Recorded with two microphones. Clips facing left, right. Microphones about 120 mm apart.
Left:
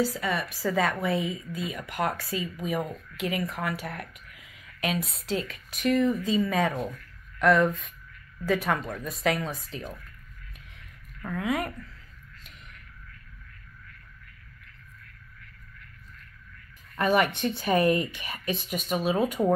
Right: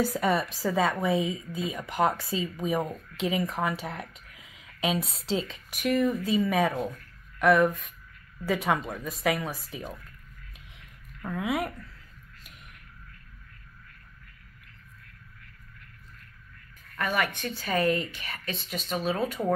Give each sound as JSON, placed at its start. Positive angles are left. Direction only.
{"t": 0.0, "sound": "a woman's voice", "side_deg": -50}
{"t": 0.7, "sound": "speech", "side_deg": -15}
{"t": 4.4, "sound": "a sound", "side_deg": -25}
{"t": 5.5, "sound": "speech", "side_deg": -15}
{"t": 11.2, "sound": "speech", "side_deg": -10}
{"t": 16.9, "sound": "speech", "side_deg": 20}